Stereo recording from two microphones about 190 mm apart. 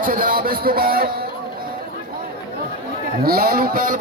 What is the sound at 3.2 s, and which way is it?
Speech, 50° right (ahead or behind).